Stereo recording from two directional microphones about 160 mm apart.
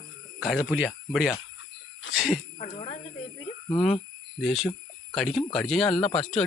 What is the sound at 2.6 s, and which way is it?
Speech, 30° left (ahead or behind).